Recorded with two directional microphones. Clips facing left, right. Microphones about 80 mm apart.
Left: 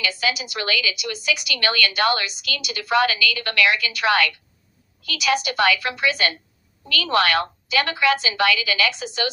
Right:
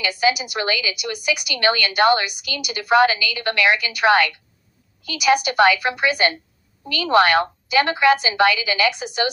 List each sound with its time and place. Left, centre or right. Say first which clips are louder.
0.0 s a woman's voice: right 5 dB; right